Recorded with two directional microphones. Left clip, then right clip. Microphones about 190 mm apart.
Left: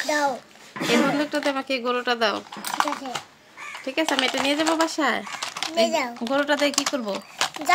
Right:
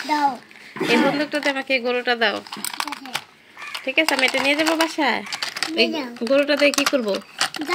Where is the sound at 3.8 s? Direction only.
10° left (ahead or behind).